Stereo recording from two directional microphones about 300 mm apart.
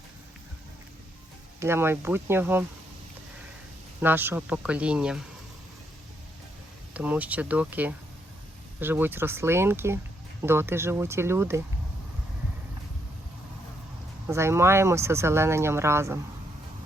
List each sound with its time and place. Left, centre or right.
1.5 s speech: centre
4.0 s speech: centre
6.9 s speech: centre
14.3 s speech: centre